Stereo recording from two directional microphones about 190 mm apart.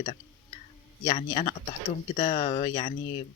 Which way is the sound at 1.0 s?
35° left (ahead or behind).